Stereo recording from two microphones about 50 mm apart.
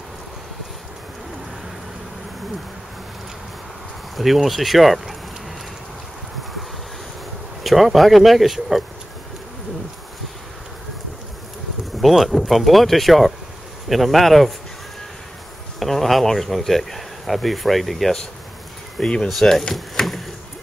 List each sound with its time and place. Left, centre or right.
4.2 s speech: centre
7.6 s speech: centre
12.0 s speech: centre
15.8 s speech: centre
18.9 s speech: centre
19.2 s speech: centre
19.7 s wood: centre